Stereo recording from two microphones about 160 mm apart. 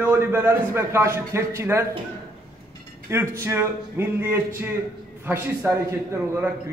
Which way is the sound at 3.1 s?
15° right (ahead or behind).